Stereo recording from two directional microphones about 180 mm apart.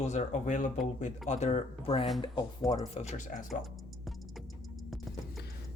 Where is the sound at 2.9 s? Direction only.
40° left (ahead or behind).